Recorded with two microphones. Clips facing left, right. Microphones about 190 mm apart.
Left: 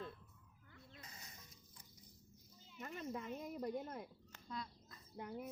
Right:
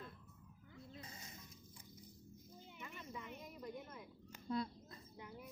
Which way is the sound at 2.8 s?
50° left (ahead or behind).